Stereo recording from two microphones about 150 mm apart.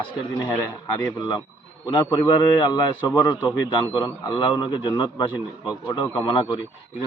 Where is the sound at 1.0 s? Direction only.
30° left (ahead or behind).